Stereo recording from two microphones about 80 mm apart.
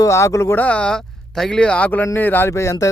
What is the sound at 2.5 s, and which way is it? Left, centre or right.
Speech, left.